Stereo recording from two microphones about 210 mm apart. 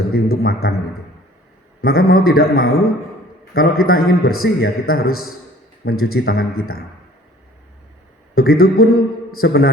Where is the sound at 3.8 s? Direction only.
85° left.